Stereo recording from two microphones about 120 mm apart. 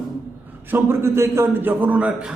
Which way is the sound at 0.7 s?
20° right (ahead or behind).